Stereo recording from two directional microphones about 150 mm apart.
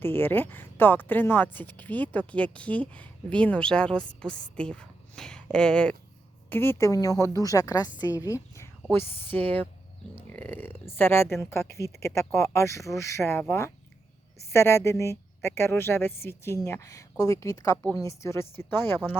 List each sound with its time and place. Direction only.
0.0 s a woman's voice: 15° left (ahead or behind)